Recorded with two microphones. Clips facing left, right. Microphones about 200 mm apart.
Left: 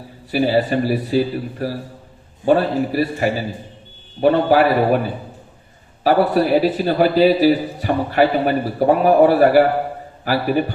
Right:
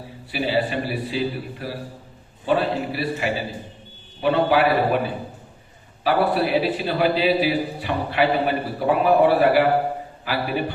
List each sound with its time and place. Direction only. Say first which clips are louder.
0.3 s a man's voice: left 6 dB; 40° left (ahead or behind)
6.0 s a man's voice: left 5 dB; 45° left (ahead or behind)